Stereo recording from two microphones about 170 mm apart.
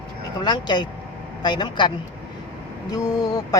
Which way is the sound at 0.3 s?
25° left (ahead or behind).